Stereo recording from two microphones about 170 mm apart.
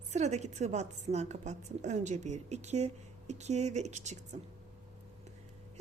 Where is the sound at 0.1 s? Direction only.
40° right (ahead or behind).